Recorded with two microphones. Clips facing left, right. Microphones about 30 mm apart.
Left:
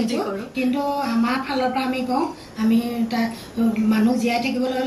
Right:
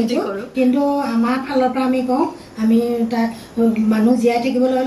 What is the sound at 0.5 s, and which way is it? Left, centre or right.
A woman's voice, centre.